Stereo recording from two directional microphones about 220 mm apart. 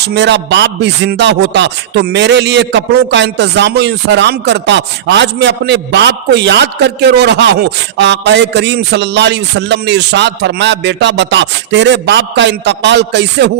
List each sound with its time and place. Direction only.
0.0 s music: 50° right (ahead or behind)